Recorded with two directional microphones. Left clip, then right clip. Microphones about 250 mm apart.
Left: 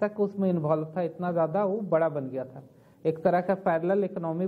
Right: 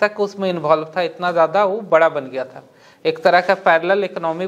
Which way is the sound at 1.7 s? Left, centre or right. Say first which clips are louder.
Right 11 dB; centre.